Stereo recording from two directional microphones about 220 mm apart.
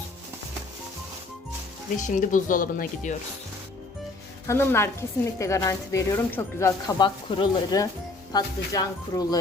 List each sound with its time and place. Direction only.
2.0 s speech: 35° left (ahead or behind)
4.4 s a woman's voice: 10° left (ahead or behind)